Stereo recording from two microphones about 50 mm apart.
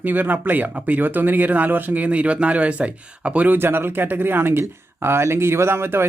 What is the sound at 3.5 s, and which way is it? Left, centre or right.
Speech, right.